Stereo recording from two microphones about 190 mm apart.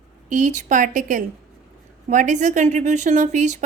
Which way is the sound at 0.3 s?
40° right (ahead or behind).